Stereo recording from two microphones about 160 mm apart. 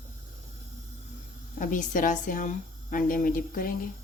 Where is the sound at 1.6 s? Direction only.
55° left (ahead or behind).